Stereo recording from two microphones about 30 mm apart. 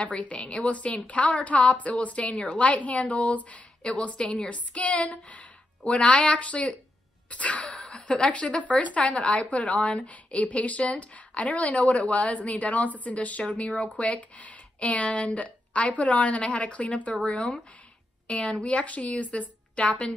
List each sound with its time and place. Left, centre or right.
0.0 s speech: left
0.7 s speech: left
3.8 s speech: left
4.5 s speech: left
7.2 s sneeze: left
7.7 s a woman's voice: left
17.3 s speech: left
19.7 s a woman's voice: left